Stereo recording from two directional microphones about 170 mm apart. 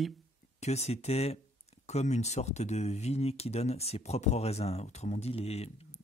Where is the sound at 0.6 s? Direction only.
40° left (ahead or behind).